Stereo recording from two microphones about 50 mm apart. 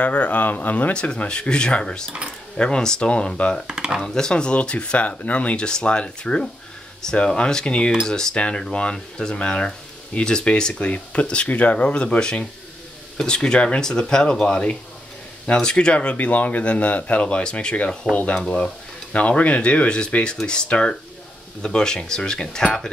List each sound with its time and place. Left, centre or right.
0.0 s speech: left
0.9 s speech: left
3.6 s speech: centre
4.0 s speech: centre
5.7 s speech: centre